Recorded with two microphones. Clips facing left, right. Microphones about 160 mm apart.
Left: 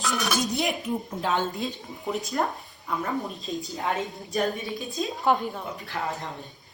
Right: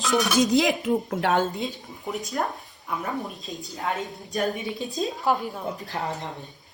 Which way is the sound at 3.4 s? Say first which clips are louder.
Left 1 dB; centre (ahead or behind).